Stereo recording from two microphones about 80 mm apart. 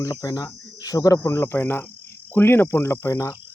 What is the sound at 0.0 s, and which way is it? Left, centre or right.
Speech, left.